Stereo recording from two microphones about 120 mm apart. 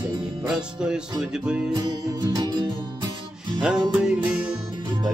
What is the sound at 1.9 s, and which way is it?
Music, 40° right (ahead or behind).